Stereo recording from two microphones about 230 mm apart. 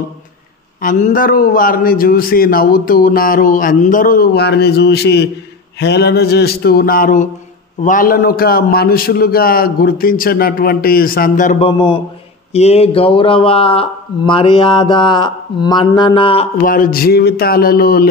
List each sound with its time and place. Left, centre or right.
0.7 s a man's voice: left
5.8 s a sound: left
7.8 s a man's voice: left
16.6 s a man's voice: left